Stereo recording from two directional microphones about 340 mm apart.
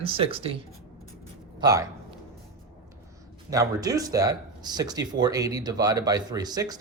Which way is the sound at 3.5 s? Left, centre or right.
Centre.